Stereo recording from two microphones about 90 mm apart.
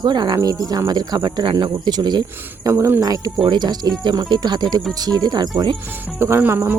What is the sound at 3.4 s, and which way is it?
Speech, 55° right (ahead or behind).